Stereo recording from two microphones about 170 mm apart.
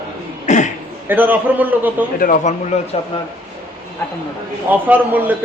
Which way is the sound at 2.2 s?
50° left (ahead or behind).